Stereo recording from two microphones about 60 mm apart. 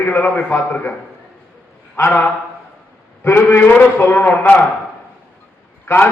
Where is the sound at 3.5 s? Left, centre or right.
Left.